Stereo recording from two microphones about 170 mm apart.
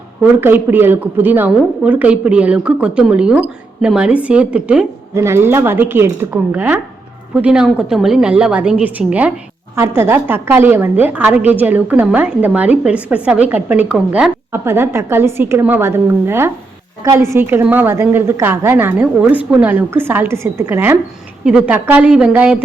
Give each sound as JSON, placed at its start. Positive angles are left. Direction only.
{"t": 0.2, "sound": "a woman's voice", "side_deg": -10}